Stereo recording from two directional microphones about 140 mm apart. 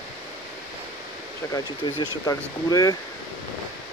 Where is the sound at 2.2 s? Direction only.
25° left (ahead or behind).